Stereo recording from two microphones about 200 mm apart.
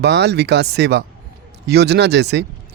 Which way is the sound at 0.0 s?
55° right (ahead or behind).